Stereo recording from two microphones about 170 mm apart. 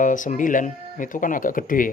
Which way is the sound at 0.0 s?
50° left (ahead or behind).